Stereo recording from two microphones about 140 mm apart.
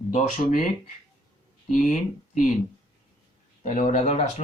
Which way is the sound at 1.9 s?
65° left (ahead or behind).